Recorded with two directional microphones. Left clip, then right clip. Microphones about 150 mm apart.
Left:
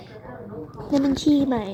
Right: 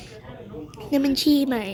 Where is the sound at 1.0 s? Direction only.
30° right (ahead or behind).